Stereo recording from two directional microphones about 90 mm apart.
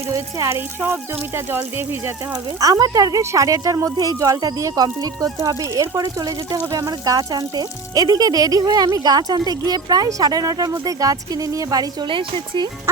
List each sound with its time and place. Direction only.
0.1 s a woman's voice: 35° right (ahead or behind)
1.5 s speech: 25° right (ahead or behind)
2.6 s a woman's voice: 40° right (ahead or behind)
12.0 s speech: 70° right (ahead or behind)